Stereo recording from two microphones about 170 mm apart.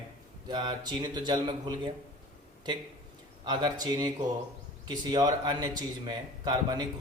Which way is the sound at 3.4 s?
25° right (ahead or behind).